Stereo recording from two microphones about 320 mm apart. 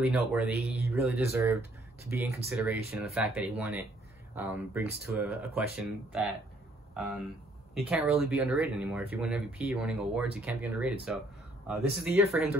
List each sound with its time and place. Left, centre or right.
0.3 s speech: centre
7.7 s speech: centre